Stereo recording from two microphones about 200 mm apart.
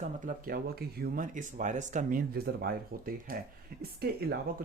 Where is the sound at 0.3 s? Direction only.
45° right (ahead or behind).